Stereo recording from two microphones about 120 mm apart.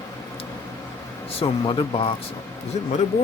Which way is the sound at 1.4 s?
45° left (ahead or behind).